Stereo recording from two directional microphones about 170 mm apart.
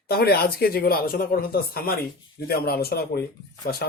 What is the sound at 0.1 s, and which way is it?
Speech, 65° left (ahead or behind).